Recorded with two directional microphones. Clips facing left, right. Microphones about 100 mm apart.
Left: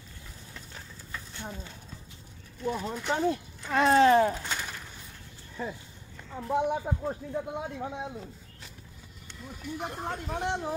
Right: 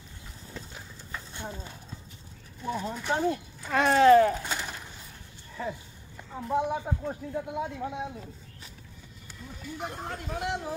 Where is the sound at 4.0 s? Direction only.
30° left (ahead or behind).